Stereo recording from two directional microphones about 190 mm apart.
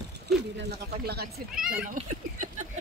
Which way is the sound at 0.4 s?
60° right (ahead or behind).